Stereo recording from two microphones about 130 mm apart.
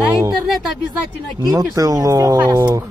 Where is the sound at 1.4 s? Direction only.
30° right (ahead or behind).